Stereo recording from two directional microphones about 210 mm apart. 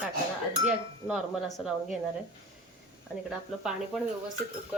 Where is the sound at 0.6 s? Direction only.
5° right (ahead or behind).